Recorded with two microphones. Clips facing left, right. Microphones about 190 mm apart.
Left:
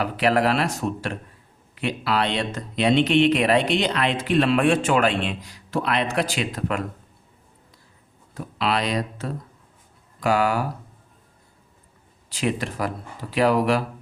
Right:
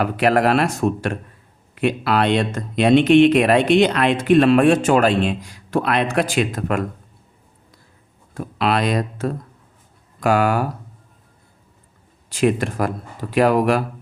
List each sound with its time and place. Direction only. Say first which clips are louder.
0.0 s speech: right 4 dB; 50° right (ahead or behind)
8.3 s speech: right 4 dB; 55° right (ahead or behind)
12.3 s speech: right 7 dB; 50° right (ahead or behind)